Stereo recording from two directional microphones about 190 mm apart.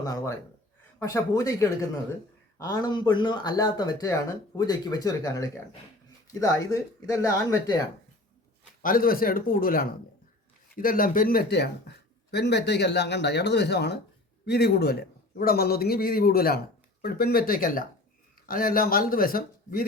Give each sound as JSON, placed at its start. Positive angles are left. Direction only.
{"t": 0.0, "sound": "speech", "side_deg": 20}
{"t": 8.8, "sound": "speech", "side_deg": 50}